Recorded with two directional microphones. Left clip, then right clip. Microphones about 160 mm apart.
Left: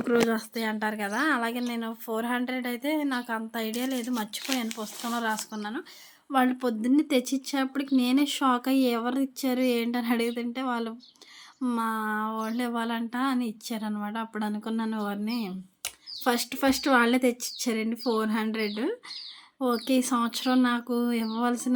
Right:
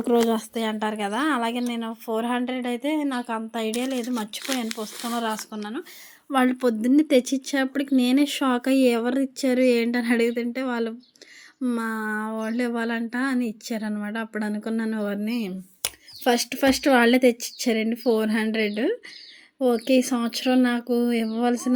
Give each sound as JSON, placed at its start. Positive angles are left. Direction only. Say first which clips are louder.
{"t": 0.1, "sound": "speech", "louder": "right 4 dB", "side_deg": -20}
{"t": 6.3, "sound": "a woman's voice", "louder": "right 4 dB", "side_deg": -25}